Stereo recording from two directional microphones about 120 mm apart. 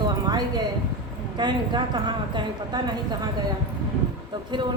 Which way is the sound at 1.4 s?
35° right (ahead or behind).